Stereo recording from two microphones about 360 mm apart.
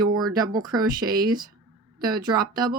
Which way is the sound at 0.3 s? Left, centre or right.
Centre.